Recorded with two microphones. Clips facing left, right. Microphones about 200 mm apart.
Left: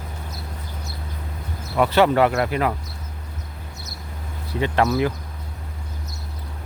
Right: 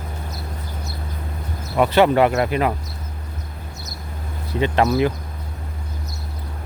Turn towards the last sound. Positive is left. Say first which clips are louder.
# right 2 dB
turn(degrees=-20)  # may be behind; listen again after turning